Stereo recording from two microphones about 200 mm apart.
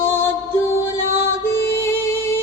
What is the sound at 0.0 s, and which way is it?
Music, 10° left (ahead or behind).